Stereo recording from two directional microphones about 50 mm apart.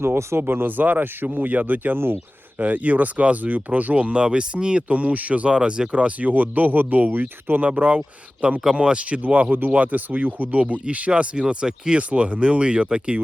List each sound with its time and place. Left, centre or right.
0.3 s speech: right
7.7 s speech: right
10.6 s speech: right